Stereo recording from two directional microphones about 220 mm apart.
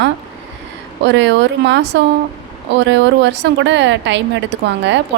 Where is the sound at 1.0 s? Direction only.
55° right (ahead or behind).